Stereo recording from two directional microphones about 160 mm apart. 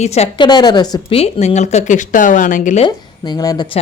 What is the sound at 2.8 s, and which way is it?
Speech, 25° left (ahead or behind).